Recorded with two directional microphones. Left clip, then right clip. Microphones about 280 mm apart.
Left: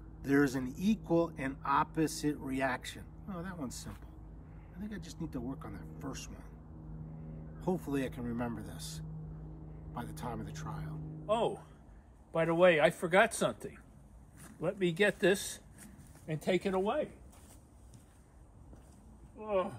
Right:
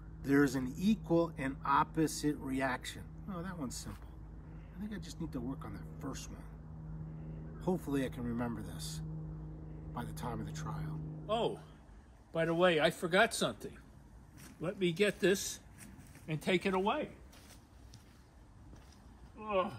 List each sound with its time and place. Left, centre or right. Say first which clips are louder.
0.2 s a man's voice: left 1 dB; centre
7.6 s a man's voice: left 1 dB; centre
11.2 s a man's voice: left 3 dB; left
16.3 s speech: left 1 dB; centre
19.4 s speech: left 1 dB; centre